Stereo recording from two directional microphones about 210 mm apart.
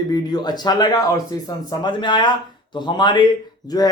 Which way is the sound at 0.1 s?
20° left (ahead or behind).